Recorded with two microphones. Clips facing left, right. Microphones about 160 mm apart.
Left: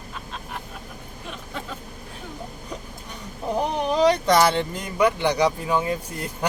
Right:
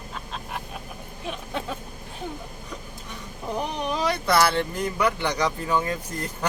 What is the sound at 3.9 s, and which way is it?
Speech, 20° left (ahead or behind).